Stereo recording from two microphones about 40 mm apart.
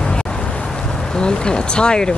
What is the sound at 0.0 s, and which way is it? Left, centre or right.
Speech, left.